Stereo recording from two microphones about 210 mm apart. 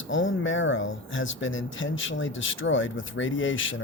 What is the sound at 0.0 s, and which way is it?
Speech, 65° left (ahead or behind).